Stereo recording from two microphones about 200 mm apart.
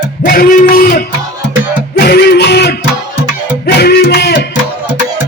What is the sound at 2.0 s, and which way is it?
Music, 55° left (ahead or behind).